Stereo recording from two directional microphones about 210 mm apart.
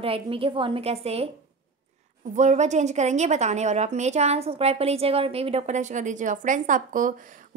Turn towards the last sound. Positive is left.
turn(degrees=-40)  # may be behind; listen again after turning